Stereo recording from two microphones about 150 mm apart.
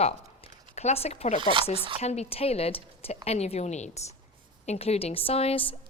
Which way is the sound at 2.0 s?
45° left (ahead or behind).